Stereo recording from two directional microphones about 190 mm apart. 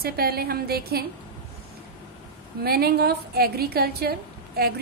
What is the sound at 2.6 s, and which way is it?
A woman's voice, 55° right (ahead or behind).